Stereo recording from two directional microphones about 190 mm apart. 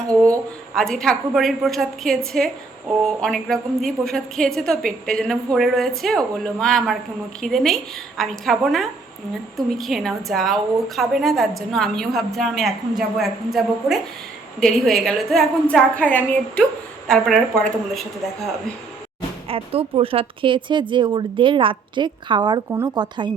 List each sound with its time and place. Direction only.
0.3 s a woman's voice: centre (ahead or behind)
19.5 s speech: 30° right (ahead or behind)